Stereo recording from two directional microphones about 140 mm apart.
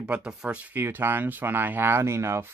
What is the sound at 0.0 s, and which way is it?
Speech, 5° right (ahead or behind).